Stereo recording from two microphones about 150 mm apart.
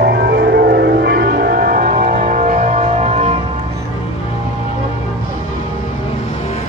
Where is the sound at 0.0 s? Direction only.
90° right; by 3.3 s 45° right (ahead or behind).